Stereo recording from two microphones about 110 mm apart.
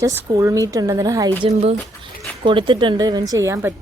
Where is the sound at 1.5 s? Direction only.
75° right (ahead or behind).